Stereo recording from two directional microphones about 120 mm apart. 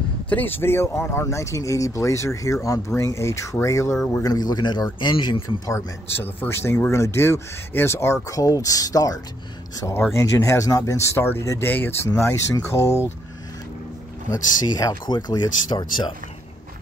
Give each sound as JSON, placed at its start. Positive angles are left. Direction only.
{"t": 0.3, "sound": "speech", "side_deg": 15}
{"t": 5.7, "sound": "speech", "side_deg": 20}
{"t": 14.3, "sound": "speech", "side_deg": 30}